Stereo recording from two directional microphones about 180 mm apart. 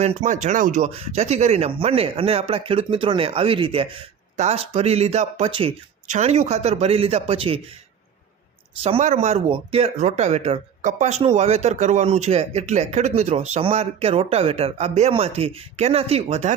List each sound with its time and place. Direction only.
0.0 s speech: 40° right (ahead or behind)
8.8 s speech: 40° right (ahead or behind)